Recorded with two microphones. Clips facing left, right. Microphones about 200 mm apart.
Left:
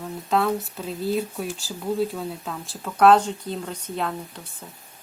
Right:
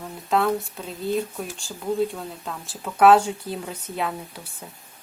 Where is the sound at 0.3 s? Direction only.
Centre (ahead or behind).